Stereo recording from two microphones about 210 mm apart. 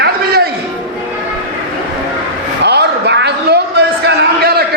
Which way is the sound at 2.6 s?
55° right (ahead or behind).